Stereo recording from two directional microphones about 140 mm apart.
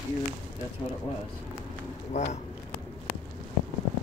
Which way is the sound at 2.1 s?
55° left (ahead or behind).